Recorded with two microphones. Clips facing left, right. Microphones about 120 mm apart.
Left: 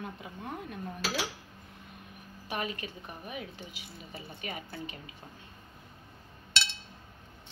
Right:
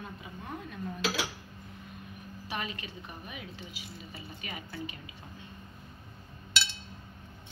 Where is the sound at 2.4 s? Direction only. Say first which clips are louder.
Left 2 dB; 45° left (ahead or behind).